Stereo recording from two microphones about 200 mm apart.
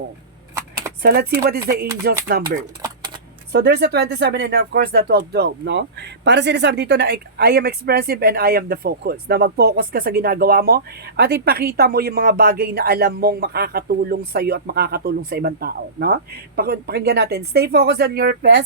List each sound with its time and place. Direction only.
1.0 s speech: 50° right (ahead or behind)
2.6 s a sound: 20° right (ahead or behind)
3.5 s speech: 55° right (ahead or behind)